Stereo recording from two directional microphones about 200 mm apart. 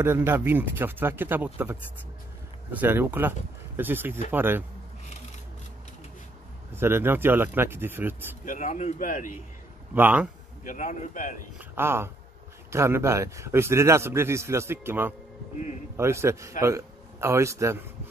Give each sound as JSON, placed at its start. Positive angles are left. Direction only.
{"t": 0.0, "sound": "a man's voice", "side_deg": -10}
{"t": 6.7, "sound": "a man's voice", "side_deg": -10}
{"t": 8.5, "sound": "a man's voice", "side_deg": 40}
{"t": 9.9, "sound": "a man's voice", "side_deg": -10}
{"t": 10.6, "sound": "a man's voice", "side_deg": 40}
{"t": 11.5, "sound": "a man's voice", "side_deg": -10}